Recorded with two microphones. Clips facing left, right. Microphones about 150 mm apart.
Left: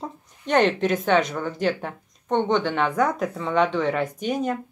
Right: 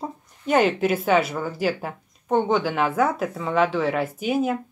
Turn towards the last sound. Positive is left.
turn(degrees=-5)  # may be behind; listen again after turning